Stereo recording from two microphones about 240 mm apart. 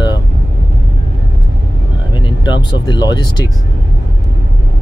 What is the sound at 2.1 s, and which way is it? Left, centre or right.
Speech, centre.